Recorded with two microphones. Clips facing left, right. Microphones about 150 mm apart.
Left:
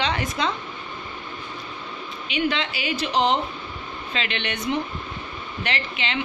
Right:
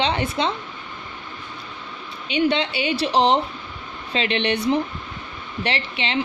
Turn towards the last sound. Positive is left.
turn(degrees=-30)  # may be behind; listen again after turning